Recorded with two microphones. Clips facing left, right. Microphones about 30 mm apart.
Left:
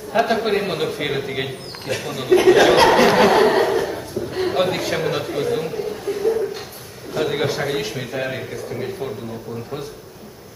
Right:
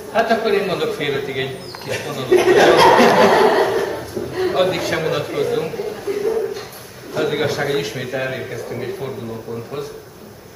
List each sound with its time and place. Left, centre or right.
0.1 s a man's voice: centre
3.3 s chuckle: centre
4.3 s a man's voice: centre
6.1 s a sound: centre
7.2 s a man's voice: centre